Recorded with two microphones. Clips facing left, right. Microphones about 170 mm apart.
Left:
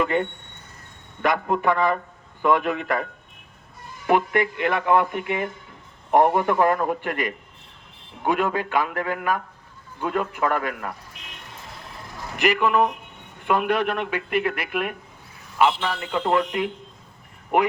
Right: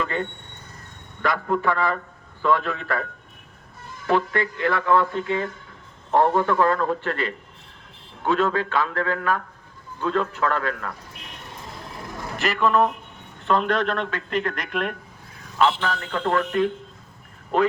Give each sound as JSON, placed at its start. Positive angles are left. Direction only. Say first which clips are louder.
{"t": 0.0, "sound": "a man's voice", "louder": "left 4 dB", "side_deg": 20}
{"t": 12.4, "sound": "speech", "louder": "left 1 dB", "side_deg": 15}